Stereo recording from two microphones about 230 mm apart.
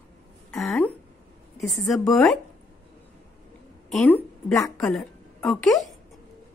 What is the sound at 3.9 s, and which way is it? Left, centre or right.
A woman's voice, centre.